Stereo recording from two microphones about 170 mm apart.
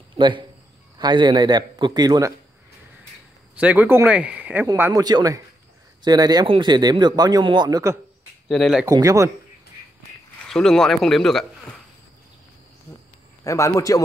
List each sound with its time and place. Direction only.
0.2 s speech: 30° right (ahead or behind)
3.5 s speech: 10° right (ahead or behind)
8.5 s a man's voice: centre (ahead or behind)
8.8 s speech: 20° right (ahead or behind)
10.5 s a man's voice: 5° left (ahead or behind)
13.4 s a man's voice: 20° left (ahead or behind)